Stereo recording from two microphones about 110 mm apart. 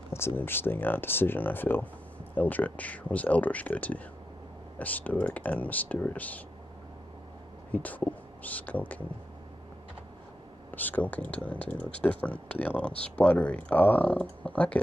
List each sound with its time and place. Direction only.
0.4 s speech: 20° left (ahead or behind)
7.7 s speech: 15° left (ahead or behind)
10.7 s speech: 15° left (ahead or behind)